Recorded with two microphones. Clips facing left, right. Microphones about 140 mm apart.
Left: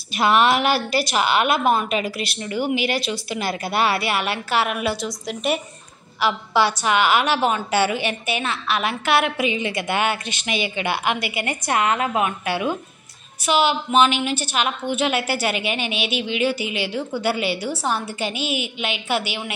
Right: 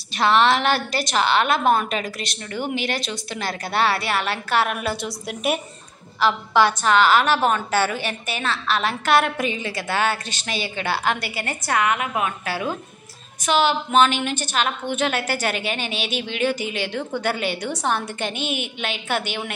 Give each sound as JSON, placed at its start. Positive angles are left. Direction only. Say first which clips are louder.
{"t": 0.1, "sound": "a woman's voice", "louder": "even", "side_deg": 10}
{"t": 6.8, "sound": "a woman's voice", "louder": "right 2 dB", "side_deg": 10}
{"t": 9.8, "sound": "a woman's voice", "louder": "left 1 dB", "side_deg": 15}
{"t": 13.5, "sound": "a woman's voice", "louder": "even", "side_deg": 10}
{"t": 15.9, "sound": "speech", "louder": "left 2 dB", "side_deg": -40}
{"t": 16.3, "sound": "a woman's voice", "louder": "even", "side_deg": 10}